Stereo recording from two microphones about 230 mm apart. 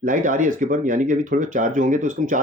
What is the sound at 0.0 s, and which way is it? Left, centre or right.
Speech, right.